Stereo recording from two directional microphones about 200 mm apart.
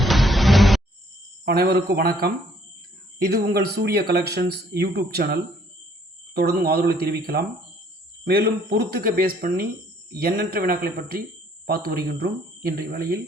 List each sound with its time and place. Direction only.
0.0 s music: centre (ahead or behind)
1.5 s speech: 55° right (ahead or behind)